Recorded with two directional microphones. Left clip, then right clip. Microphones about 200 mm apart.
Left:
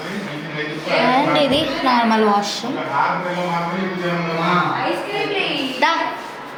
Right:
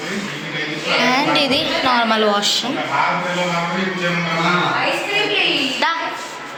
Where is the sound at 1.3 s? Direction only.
5° left (ahead or behind).